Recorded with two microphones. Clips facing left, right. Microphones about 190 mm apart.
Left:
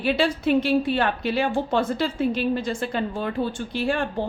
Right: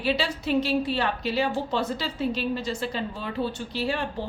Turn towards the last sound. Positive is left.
turn(degrees=50)  # may be behind; listen again after turning